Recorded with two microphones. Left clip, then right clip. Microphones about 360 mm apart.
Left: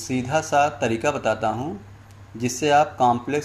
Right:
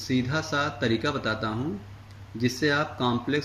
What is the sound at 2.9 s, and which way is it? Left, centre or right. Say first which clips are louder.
Speech: left 8 dB; left.